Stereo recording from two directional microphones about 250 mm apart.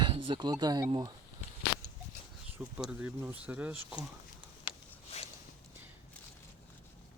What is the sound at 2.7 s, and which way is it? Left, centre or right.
Speech, centre.